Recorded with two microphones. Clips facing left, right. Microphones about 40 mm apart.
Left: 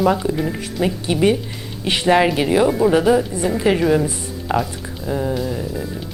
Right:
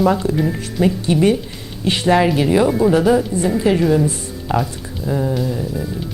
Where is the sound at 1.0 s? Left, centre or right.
Centre.